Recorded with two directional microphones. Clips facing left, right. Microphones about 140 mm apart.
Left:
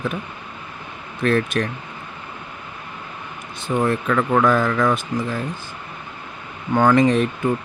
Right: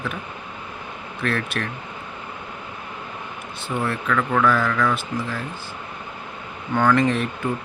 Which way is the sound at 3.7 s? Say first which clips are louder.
Left 4 dB; 25° left (ahead or behind).